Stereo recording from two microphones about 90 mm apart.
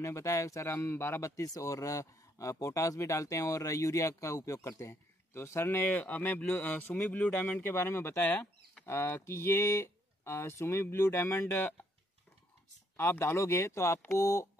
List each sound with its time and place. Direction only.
0.0 s speech: 35° left (ahead or behind)
5.9 s speech: 15° left (ahead or behind)
12.9 s speech: 25° left (ahead or behind)